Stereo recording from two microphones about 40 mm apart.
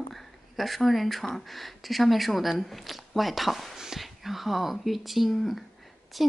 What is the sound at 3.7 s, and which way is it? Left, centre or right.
Whispering, centre.